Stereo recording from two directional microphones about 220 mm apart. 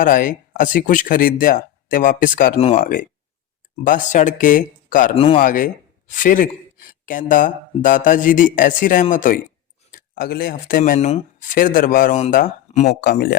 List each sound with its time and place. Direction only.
0.0 s speech: 40° left (ahead or behind)
2.8 s speech: 40° left (ahead or behind)
5.1 s speech: 25° left (ahead or behind)
5.4 s speech: 40° left (ahead or behind)
12.9 s speech: 45° left (ahead or behind)